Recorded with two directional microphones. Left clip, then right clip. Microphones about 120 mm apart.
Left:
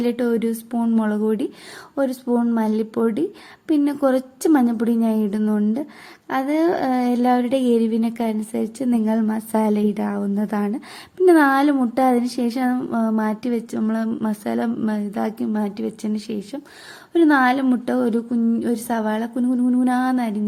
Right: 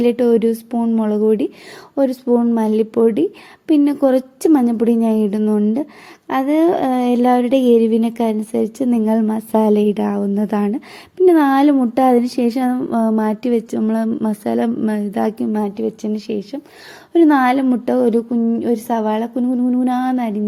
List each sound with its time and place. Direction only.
0.0 s a woman's voice: 30° right (ahead or behind)
0.8 s a woman's voice: 5° right (ahead or behind)
12.0 s a woman's voice: 30° right (ahead or behind)
15.6 s a woman's voice: 15° right (ahead or behind)
18.3 s a woman's voice: 10° right (ahead or behind)